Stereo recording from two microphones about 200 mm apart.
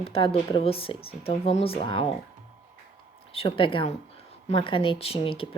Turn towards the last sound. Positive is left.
turn(degrees=25)  # may be behind; listen again after turning